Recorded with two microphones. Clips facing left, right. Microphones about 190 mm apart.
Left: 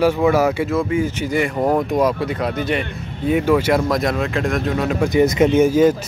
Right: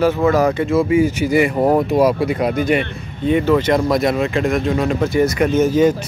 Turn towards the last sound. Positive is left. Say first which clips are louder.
# left 1 dB
turn(degrees=10)  # may be behind; listen again after turning